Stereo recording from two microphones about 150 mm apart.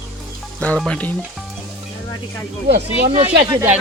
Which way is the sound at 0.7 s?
5° left (ahead or behind).